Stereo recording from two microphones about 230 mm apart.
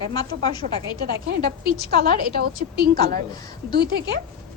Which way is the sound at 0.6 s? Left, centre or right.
Right.